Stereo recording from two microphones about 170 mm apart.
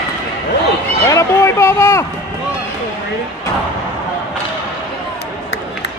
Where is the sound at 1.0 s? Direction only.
15° left (ahead or behind).